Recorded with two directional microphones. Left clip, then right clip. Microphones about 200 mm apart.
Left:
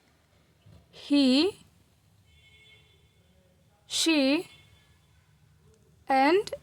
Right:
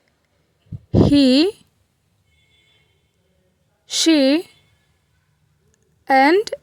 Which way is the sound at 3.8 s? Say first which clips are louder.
Right 9 dB; 30° right (ahead or behind).